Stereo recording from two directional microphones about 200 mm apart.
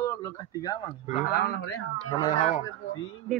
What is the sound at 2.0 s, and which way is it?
Speech, 15° left (ahead or behind).